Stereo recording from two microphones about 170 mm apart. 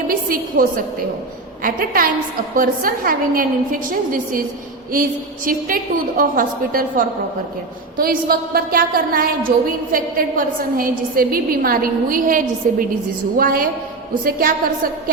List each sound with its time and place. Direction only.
0.1 s a woman's voice: 55° right (ahead or behind)
5.5 s a woman's voice: 55° right (ahead or behind)